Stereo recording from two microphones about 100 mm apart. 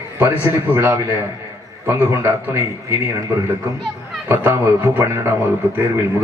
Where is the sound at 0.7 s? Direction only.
30° right (ahead or behind).